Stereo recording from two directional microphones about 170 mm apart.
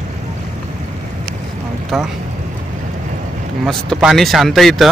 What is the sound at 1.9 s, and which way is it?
Speech, centre (ahead or behind).